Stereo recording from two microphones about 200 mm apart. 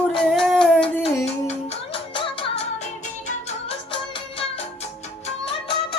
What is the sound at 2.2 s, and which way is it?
Music, 25° left (ahead or behind).